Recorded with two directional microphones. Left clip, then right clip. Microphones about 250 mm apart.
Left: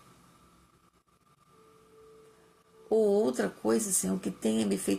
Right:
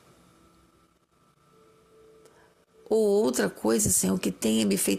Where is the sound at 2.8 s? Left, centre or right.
Right.